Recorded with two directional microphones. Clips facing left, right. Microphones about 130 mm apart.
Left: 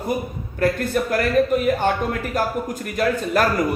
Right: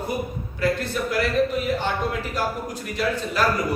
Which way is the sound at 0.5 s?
50° left (ahead or behind).